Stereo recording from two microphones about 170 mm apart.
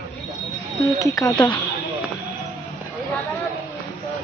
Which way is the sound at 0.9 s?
20° left (ahead or behind).